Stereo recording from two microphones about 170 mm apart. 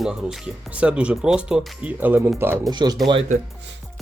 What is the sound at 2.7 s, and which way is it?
Speech, 25° right (ahead or behind).